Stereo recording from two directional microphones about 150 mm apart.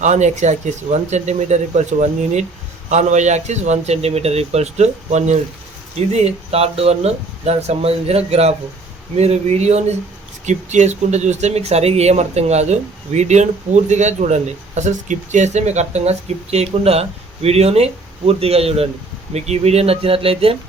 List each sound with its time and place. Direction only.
0.0 s speech: 50° right (ahead or behind)